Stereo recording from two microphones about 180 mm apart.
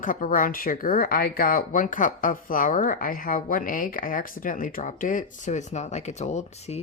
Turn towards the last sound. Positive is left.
turn(degrees=35)  # may be behind; listen again after turning